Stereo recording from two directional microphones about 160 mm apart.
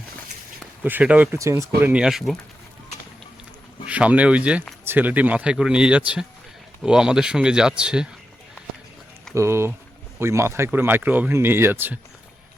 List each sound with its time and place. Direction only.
0.9 s speech: 10° right (ahead or behind)
1.8 s speech: 5° right (ahead or behind)
3.8 s speech: 10° right (ahead or behind)
9.3 s speech: 15° right (ahead or behind)